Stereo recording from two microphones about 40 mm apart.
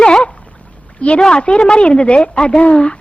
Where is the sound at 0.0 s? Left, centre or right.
Left.